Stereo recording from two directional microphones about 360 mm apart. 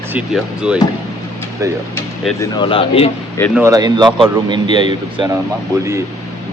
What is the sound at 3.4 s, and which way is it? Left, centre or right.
Speech, centre.